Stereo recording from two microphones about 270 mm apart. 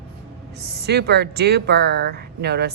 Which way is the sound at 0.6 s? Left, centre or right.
Right.